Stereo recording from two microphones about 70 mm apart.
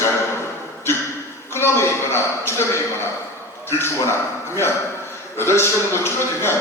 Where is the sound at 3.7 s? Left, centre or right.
Left.